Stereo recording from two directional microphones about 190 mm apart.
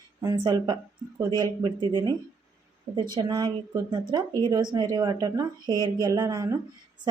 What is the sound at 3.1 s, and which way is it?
A woman's voice, 20° right (ahead or behind).